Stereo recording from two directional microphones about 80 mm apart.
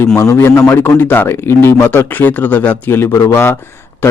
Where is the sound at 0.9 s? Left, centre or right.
Left.